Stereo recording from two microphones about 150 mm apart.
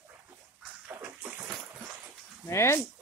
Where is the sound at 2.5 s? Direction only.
15° left (ahead or behind).